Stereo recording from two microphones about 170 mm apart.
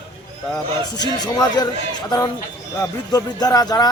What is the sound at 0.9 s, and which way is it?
Speech, 25° left (ahead or behind).